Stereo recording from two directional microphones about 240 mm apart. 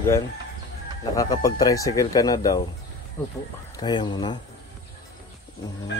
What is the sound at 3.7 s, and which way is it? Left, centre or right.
Speech, centre.